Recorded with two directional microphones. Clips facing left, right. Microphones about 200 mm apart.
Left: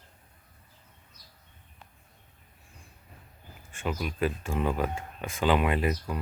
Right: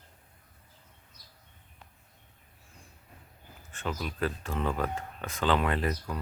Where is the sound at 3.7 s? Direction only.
10° left (ahead or behind).